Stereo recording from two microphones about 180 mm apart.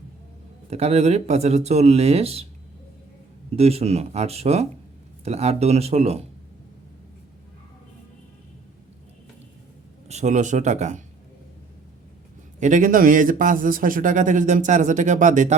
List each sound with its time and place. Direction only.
0.7 s speech: 35° right (ahead or behind)
3.5 s speech: 35° right (ahead or behind)
10.1 s speech: 40° right (ahead or behind)
12.5 s a man's voice: 45° right (ahead or behind)